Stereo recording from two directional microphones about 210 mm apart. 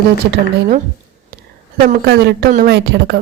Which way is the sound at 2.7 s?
55° right (ahead or behind).